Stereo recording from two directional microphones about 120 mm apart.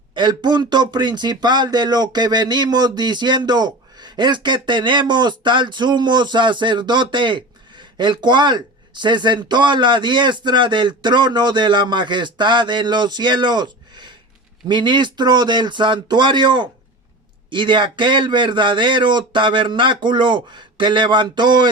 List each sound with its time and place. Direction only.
0.1 s speech: 40° right (ahead or behind)